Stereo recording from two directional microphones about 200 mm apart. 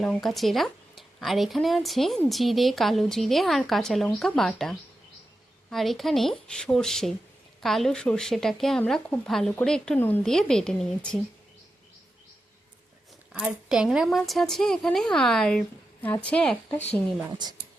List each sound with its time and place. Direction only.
0.0 s speech: 5° left (ahead or behind)
13.3 s speech: 5° right (ahead or behind)
17.4 s speech: 20° right (ahead or behind)